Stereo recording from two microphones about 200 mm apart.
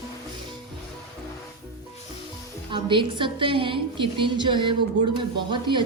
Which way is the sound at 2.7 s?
25° right (ahead or behind).